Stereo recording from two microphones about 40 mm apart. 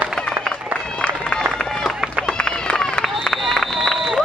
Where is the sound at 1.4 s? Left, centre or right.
Centre.